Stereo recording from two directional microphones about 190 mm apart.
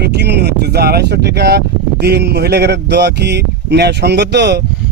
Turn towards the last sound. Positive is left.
turn(degrees=-60)  # may be behind; listen again after turning